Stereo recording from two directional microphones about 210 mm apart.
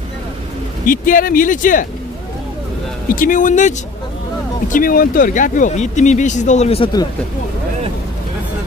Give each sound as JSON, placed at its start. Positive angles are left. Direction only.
{"t": 0.8, "sound": "speech", "side_deg": 40}
{"t": 3.2, "sound": "speech", "side_deg": 40}